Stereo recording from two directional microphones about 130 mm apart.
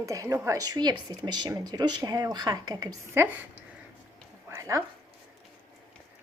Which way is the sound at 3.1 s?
15° right (ahead or behind).